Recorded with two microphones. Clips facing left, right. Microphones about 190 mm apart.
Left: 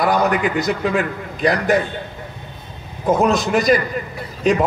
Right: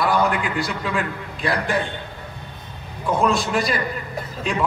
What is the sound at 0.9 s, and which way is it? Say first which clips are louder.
Speech: left 5 dB; 40° left (ahead or behind).